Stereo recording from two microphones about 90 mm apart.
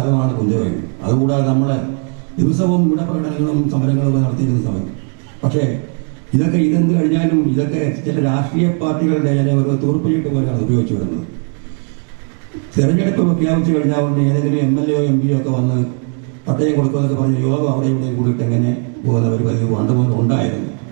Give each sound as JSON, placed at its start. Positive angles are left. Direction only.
{"t": 0.0, "sound": "a sound", "side_deg": -20}
{"t": 2.5, "sound": "a man's voice", "side_deg": -15}
{"t": 12.7, "sound": "a man's voice", "side_deg": -15}